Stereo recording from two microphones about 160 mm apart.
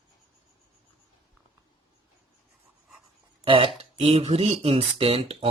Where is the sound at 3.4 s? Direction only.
35° right (ahead or behind).